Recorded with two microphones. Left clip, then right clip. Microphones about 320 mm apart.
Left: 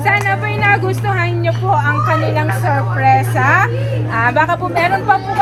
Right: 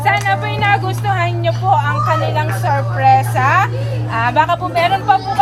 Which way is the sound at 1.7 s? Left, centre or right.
Right.